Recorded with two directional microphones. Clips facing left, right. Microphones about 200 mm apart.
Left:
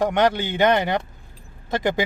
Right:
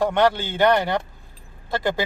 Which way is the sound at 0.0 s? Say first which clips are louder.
Even; 20° left (ahead or behind).